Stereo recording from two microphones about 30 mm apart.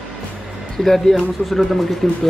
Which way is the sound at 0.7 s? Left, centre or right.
Centre.